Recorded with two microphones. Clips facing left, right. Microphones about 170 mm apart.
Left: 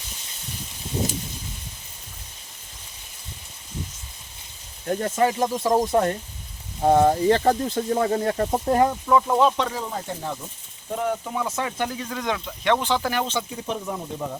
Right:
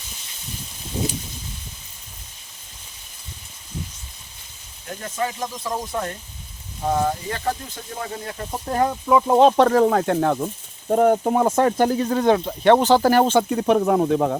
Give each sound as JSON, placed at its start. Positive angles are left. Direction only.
{"t": 4.9, "sound": "speech", "side_deg": 45}
{"t": 5.4, "sound": "speech", "side_deg": 35}
{"t": 7.9, "sound": "speech", "side_deg": 50}
{"t": 8.5, "sound": "speech", "side_deg": 25}
{"t": 9.2, "sound": "speech", "side_deg": -30}
{"t": 9.5, "sound": "speech", "side_deg": -55}